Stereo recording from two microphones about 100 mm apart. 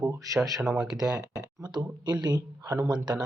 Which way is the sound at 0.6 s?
Centre (ahead or behind).